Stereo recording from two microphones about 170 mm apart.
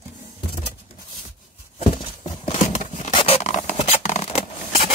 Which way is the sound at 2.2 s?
40° left (ahead or behind).